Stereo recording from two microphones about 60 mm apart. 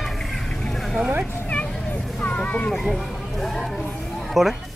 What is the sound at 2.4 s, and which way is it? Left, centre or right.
Children playing, left.